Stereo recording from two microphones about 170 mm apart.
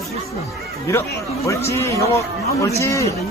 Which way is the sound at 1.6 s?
15° left (ahead or behind).